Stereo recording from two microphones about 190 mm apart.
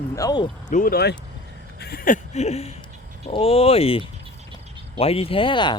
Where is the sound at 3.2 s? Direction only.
30° left (ahead or behind).